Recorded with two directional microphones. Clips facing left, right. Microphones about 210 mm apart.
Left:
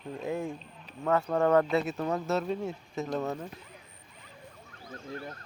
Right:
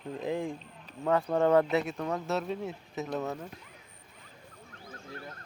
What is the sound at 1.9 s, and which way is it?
Speech, 5° left (ahead or behind).